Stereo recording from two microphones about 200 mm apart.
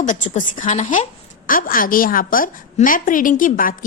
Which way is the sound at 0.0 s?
40° left (ahead or behind).